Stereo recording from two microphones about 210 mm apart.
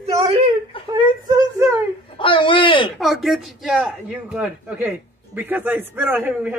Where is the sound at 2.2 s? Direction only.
25° left (ahead or behind).